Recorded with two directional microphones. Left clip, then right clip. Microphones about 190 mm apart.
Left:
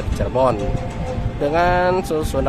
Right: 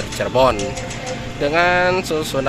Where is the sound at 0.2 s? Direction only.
5° left (ahead or behind).